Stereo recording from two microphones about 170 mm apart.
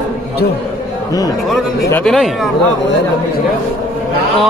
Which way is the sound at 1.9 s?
5° left (ahead or behind).